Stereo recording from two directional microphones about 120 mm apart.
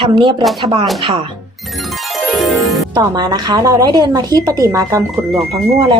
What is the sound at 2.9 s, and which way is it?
A woman's voice, 35° right (ahead or behind).